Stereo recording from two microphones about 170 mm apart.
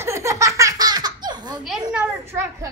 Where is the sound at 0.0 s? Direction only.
15° right (ahead or behind).